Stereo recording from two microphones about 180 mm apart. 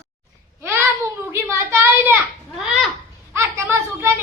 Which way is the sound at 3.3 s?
15° right (ahead or behind).